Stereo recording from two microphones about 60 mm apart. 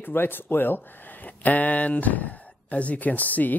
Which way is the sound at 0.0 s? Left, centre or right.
Left.